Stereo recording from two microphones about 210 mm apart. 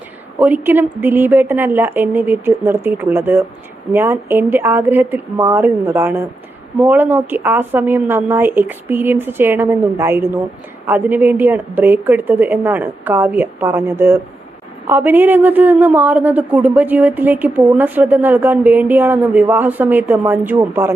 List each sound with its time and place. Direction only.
0.3 s a woman's voice: 10° right (ahead or behind)